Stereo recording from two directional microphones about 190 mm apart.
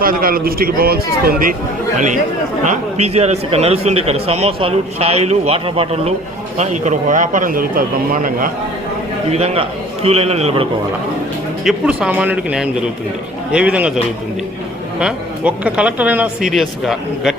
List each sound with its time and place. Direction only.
0.0 s a man's voice: 50° right (ahead or behind)
2.6 s a man's voice: 35° right (ahead or behind)
9.3 s a man's voice: 30° right (ahead or behind)
11.6 s speech: 5° right (ahead or behind)